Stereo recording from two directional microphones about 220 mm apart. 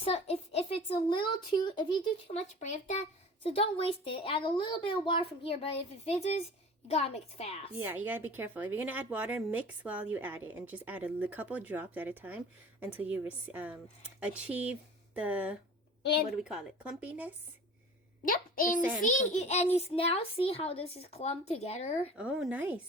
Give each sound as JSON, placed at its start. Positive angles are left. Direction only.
{"t": 0.0, "sound": "speech", "side_deg": 25}
{"t": 7.8, "sound": "a woman's voice", "side_deg": -10}
{"t": 18.3, "sound": "a child's voice", "side_deg": 40}
{"t": 22.2, "sound": "speech", "side_deg": -5}